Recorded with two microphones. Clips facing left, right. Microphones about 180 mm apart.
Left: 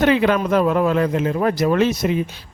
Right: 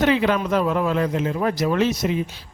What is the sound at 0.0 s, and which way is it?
A man's voice, 55° left (ahead or behind).